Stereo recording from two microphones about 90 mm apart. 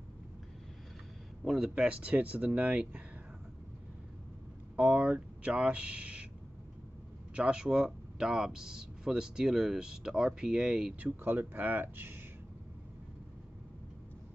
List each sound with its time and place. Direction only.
1.4 s speech: 5° right (ahead or behind)
4.7 s speech: 15° right (ahead or behind)
7.3 s speech: 10° right (ahead or behind)
11.0 s speech: 20° right (ahead or behind)